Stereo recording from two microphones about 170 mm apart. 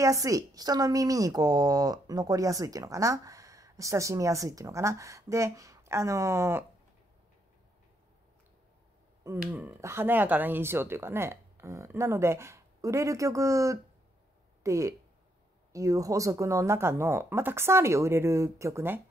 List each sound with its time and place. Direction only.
0.0 s a woman's voice: 20° right (ahead or behind)
9.4 s speech: 10° right (ahead or behind)